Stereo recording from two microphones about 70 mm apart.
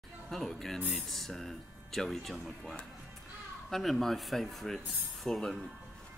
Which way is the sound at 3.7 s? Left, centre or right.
Centre.